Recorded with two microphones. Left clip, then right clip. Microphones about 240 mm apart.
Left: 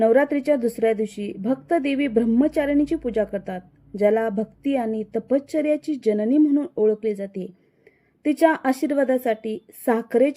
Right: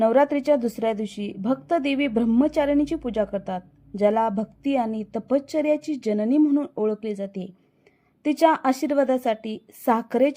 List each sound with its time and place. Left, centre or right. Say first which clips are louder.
0.0 s a woman's voice: left 1 dB; centre